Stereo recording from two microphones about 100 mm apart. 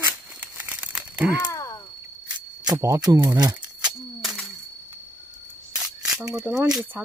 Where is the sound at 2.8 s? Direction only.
30° right (ahead or behind).